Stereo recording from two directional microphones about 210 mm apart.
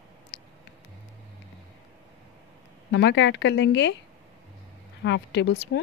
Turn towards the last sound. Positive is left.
turn(degrees=55)  # may be behind; listen again after turning